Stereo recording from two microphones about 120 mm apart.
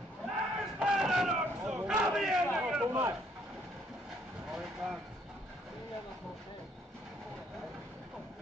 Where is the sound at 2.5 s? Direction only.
5° right (ahead or behind).